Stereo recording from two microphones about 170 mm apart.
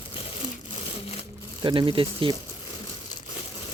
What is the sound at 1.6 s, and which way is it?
Speech, 30° right (ahead or behind).